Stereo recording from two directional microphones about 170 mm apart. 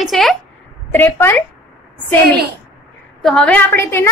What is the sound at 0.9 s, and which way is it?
Speech, 10° left (ahead or behind).